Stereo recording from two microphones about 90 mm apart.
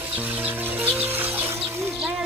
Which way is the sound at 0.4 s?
20° right (ahead or behind).